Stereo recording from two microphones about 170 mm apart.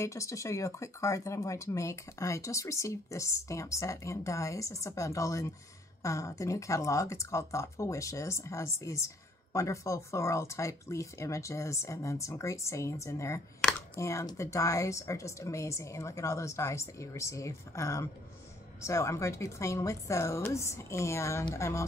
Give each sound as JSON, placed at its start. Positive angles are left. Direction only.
{"t": 0.0, "sound": "speech", "side_deg": 15}